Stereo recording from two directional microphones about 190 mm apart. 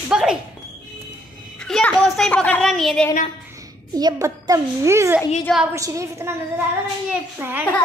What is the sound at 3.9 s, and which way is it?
A child's voice, 20° right (ahead or behind).